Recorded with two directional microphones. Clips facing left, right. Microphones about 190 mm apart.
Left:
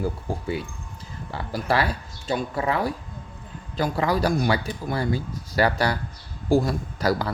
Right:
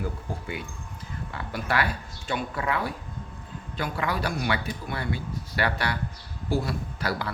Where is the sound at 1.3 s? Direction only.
35° left (ahead or behind).